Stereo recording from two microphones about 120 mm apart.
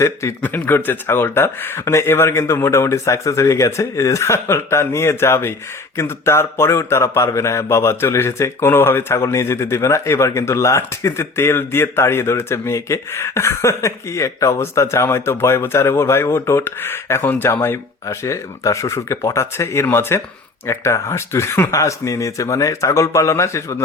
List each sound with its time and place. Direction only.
0.0 s a man's voice: 25° left (ahead or behind)